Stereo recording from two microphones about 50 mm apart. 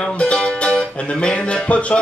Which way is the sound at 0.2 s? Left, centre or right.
Left.